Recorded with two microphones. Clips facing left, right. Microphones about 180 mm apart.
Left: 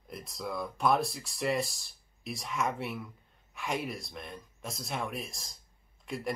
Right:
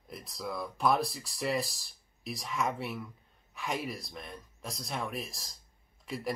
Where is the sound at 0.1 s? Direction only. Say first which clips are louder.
Left 1 dB; centre (ahead or behind).